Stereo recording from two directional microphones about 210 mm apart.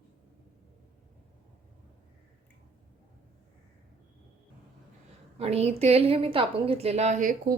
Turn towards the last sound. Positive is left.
turn(degrees=-35)  # may be behind; listen again after turning